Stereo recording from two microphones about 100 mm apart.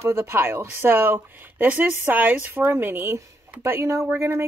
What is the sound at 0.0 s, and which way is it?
Speech, 25° right (ahead or behind).